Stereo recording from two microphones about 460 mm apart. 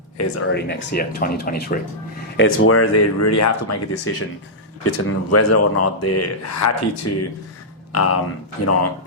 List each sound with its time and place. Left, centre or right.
0.5 s speech: left